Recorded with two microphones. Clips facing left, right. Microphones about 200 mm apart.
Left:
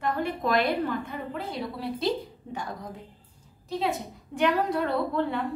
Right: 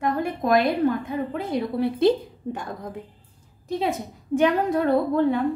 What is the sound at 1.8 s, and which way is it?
A woman's voice, 55° right (ahead or behind).